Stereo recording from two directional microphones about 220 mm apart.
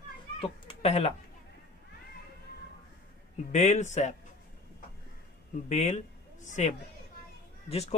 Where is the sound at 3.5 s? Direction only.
35° left (ahead or behind).